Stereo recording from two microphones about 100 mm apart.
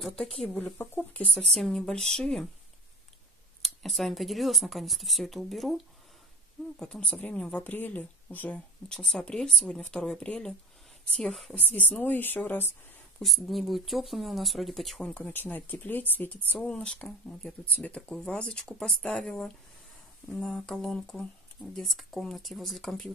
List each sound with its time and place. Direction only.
0.0 s speech: 10° left (ahead or behind)
0.7 s speech: 15° left (ahead or behind)
1.5 s speech: 5° left (ahead or behind)
3.6 s speech: centre (ahead or behind)
6.8 s speech: 10° left (ahead or behind)
11.7 s a woman's voice: 15° left (ahead or behind)
13.2 s speech: centre (ahead or behind)
15.0 s speech: 15° left (ahead or behind)